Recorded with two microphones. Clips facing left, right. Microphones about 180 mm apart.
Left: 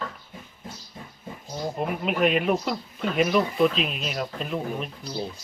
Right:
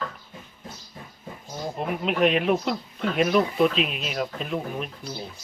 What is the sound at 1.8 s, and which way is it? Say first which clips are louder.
Speech: right 1 dB; centre (ahead or behind).